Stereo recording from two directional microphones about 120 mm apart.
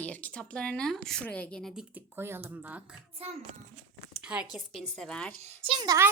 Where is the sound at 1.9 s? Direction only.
20° right (ahead or behind).